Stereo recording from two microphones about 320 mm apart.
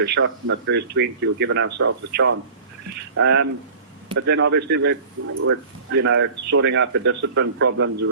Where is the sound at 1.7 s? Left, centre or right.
Right.